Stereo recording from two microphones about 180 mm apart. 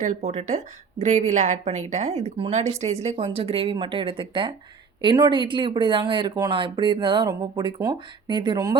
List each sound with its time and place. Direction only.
0.0 s a woman's voice: 40° right (ahead or behind); by 8.7 s 20° right (ahead or behind)